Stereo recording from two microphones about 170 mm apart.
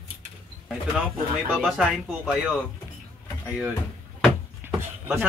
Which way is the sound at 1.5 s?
Centre (ahead or behind).